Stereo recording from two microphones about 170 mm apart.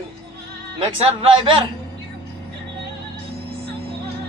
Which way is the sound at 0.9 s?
30° right (ahead or behind).